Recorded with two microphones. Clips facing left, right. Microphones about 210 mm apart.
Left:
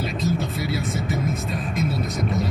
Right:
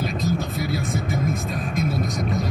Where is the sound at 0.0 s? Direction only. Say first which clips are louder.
Even; 50° right (ahead or behind).